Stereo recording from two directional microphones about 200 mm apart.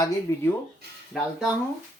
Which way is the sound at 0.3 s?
15° left (ahead or behind).